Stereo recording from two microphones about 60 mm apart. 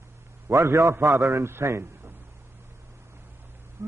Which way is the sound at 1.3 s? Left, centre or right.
Right.